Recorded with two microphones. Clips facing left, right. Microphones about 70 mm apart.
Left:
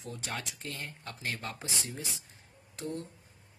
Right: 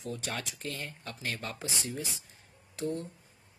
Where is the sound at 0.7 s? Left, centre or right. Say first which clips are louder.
Right 1 dB; left.